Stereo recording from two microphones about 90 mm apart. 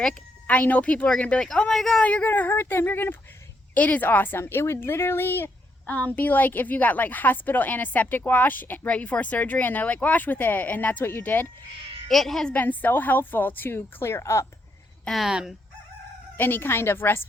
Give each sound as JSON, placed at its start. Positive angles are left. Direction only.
{"t": 0.0, "sound": "a woman's voice", "side_deg": 10}
{"t": 2.0, "sound": "speech", "side_deg": 15}
{"t": 12.0, "sound": "speech", "side_deg": 0}
{"t": 12.5, "sound": "speech", "side_deg": 20}
{"t": 15.0, "sound": "speech", "side_deg": 0}
{"t": 16.4, "sound": "speech", "side_deg": 25}